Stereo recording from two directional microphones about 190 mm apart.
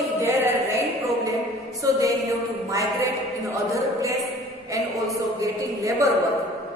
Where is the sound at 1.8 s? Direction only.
15° right (ahead or behind).